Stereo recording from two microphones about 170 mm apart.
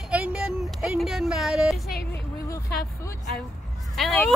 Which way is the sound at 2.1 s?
15° left (ahead or behind).